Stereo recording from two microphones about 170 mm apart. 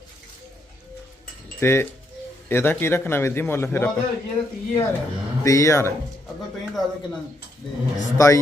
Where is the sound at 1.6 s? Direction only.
15° left (ahead or behind).